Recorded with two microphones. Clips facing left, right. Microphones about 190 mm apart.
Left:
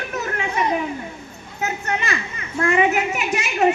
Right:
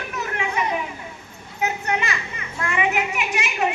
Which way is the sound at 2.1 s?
40° left (ahead or behind).